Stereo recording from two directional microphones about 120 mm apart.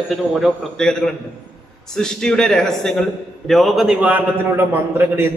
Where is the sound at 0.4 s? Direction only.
5° left (ahead or behind).